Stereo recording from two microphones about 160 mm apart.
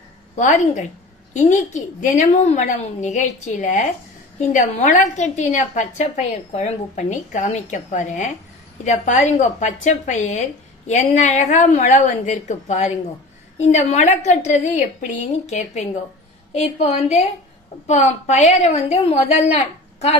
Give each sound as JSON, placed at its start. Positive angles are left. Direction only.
{"t": 0.4, "sound": "a woman's voice", "side_deg": 50}